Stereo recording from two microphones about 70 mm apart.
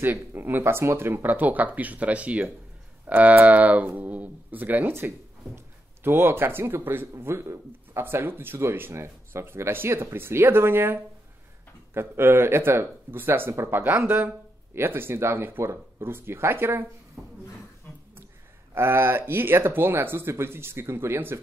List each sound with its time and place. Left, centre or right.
0.0 s speech: right
17.9 s a sound: left
18.8 s speech: right